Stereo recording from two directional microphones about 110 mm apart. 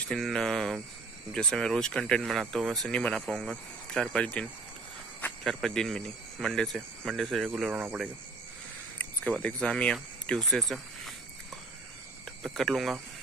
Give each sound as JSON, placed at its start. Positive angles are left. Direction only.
{"t": 0.1, "sound": "speech", "side_deg": 5}
{"t": 7.5, "sound": "speech", "side_deg": -15}
{"t": 9.4, "sound": "speech", "side_deg": 10}
{"t": 12.5, "sound": "speech", "side_deg": 0}